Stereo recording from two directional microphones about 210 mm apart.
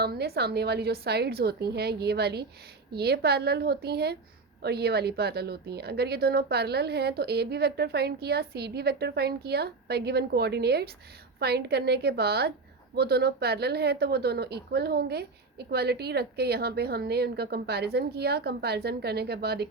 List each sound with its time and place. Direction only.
0.0 s speech: 50° right (ahead or behind)